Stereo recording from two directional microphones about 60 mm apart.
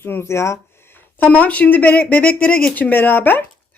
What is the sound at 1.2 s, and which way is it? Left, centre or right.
Speech, left.